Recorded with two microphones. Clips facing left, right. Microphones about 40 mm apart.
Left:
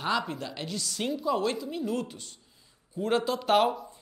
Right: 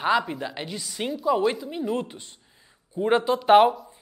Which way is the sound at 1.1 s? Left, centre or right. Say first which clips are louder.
Right 6 dB; centre.